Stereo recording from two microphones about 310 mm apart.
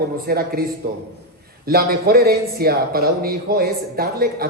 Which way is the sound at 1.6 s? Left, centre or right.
Right.